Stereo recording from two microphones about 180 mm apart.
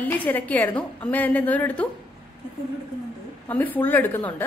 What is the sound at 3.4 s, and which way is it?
A woman's voice, 10° left (ahead or behind).